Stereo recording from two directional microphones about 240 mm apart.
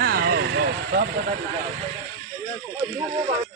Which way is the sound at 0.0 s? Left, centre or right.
Right.